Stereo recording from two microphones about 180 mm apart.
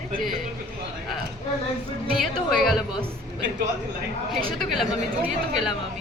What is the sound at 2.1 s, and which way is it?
Speech, centre (ahead or behind).